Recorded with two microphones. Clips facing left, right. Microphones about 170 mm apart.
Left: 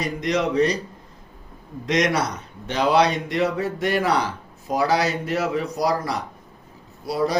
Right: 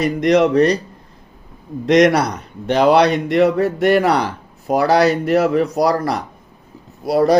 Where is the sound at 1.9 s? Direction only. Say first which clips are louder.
Right 9 dB; 60° right (ahead or behind).